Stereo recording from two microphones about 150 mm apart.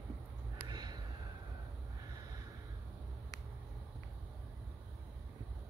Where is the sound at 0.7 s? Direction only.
30° right (ahead or behind).